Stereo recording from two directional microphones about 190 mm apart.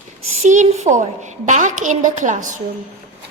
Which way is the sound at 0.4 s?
40° right (ahead or behind).